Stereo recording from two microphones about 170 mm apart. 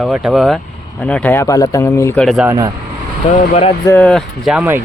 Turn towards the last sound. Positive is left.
turn(degrees=-10)  # may be behind; listen again after turning